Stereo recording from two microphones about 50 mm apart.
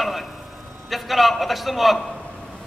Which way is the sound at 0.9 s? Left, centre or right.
Centre.